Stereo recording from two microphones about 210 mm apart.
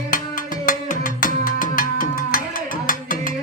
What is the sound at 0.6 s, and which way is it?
Music, 40° left (ahead or behind).